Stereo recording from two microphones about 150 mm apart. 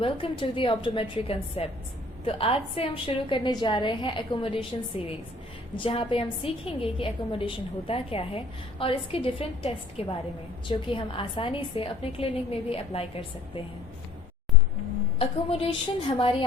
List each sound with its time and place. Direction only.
0.0 s a woman's voice: 35° left (ahead or behind)
15.2 s a woman's voice: 40° left (ahead or behind)